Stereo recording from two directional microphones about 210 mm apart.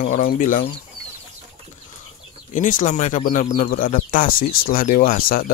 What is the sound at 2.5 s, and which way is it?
Speech, 40° left (ahead or behind).